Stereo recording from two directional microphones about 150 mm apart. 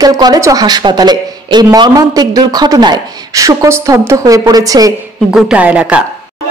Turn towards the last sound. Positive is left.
turn(degrees=-10)  # may be behind; listen again after turning